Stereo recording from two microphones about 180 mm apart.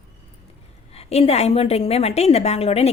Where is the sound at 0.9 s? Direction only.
35° left (ahead or behind).